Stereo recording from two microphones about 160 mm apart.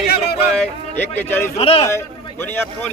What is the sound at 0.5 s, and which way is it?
Speech, 10° left (ahead or behind).